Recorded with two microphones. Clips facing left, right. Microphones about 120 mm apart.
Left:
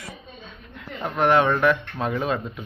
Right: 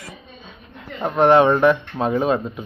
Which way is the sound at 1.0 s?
25° right (ahead or behind).